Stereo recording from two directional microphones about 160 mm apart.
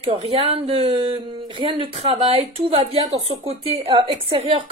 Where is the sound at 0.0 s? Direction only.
35° right (ahead or behind).